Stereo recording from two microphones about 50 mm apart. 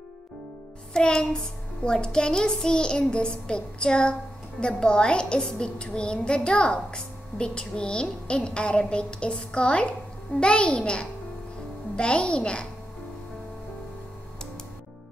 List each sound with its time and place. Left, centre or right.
0.9 s a child's voice: centre
1.9 s child singing: centre